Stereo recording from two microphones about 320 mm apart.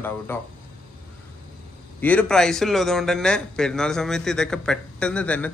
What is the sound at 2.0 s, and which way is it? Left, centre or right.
A man's voice, centre.